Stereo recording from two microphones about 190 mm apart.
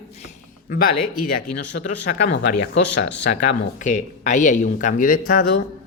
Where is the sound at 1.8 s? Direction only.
75° left (ahead or behind).